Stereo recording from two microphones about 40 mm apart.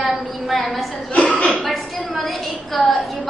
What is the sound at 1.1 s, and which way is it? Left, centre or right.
Speech, left.